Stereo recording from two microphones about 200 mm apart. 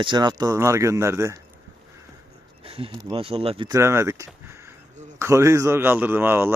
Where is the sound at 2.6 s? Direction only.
25° right (ahead or behind).